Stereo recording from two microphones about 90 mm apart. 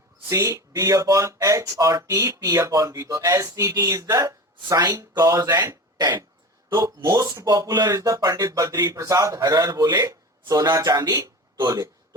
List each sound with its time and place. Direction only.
0.3 s speech: 35° right (ahead or behind)